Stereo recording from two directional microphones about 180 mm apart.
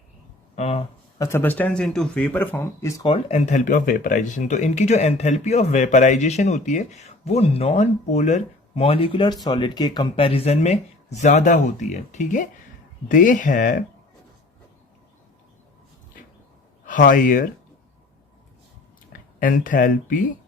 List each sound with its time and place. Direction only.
0.5 s speech: 35° left (ahead or behind)
1.2 s speech: 10° left (ahead or behind)
3.0 s speech: 30° left (ahead or behind); by 13.8 s 45° left (ahead or behind)
16.8 s speech: 50° left (ahead or behind)
19.4 s speech: 50° left (ahead or behind)